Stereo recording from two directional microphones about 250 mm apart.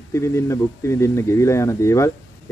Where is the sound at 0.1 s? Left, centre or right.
Centre.